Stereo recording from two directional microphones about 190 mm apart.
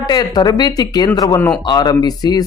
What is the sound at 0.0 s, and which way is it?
Speech, 20° left (ahead or behind).